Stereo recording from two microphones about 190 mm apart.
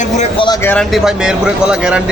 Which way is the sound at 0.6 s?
5° left (ahead or behind).